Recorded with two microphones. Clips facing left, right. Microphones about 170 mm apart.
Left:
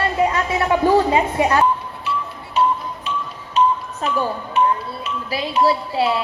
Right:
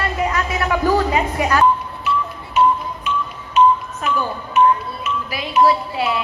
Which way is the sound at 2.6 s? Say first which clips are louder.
Right 3 dB; 35° left (ahead or behind).